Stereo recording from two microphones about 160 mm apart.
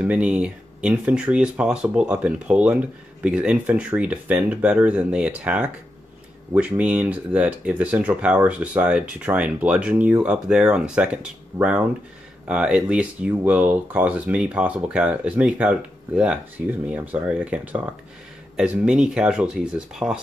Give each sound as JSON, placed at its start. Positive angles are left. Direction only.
{"t": 0.0, "sound": "speech", "side_deg": -5}